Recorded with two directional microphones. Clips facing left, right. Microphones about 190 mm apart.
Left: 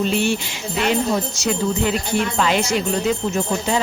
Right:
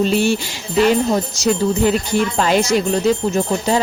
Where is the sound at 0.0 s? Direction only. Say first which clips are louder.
Right 4 dB; 40° right (ahead or behind).